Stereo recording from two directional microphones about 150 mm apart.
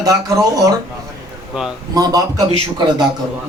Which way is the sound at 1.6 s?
5° right (ahead or behind).